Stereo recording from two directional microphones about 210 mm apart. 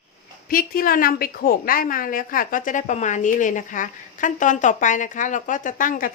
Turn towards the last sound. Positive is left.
turn(degrees=40)  # may be behind; listen again after turning